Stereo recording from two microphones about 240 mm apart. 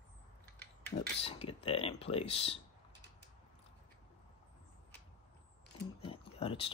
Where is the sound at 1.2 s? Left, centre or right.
Left.